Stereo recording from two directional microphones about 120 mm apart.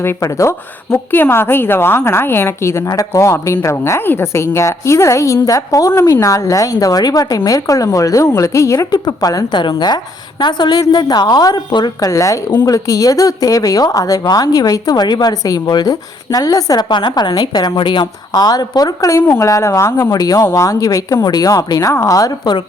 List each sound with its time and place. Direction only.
0.0 s a woman's voice: 25° left (ahead or behind)